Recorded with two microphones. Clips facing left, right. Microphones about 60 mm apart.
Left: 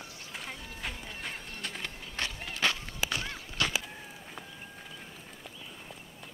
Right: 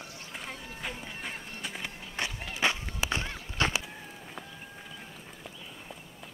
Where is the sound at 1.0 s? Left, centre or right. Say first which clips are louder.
Right 1 dB; centre.